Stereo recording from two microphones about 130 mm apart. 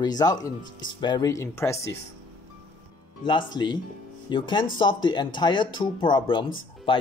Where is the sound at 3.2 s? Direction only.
35° left (ahead or behind).